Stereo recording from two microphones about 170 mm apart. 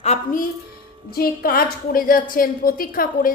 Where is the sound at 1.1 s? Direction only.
60° left (ahead or behind).